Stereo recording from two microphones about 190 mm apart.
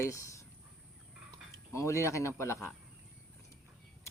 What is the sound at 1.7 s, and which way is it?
Speech, 15° left (ahead or behind).